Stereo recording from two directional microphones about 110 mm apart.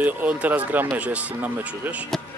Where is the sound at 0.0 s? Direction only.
15° right (ahead or behind).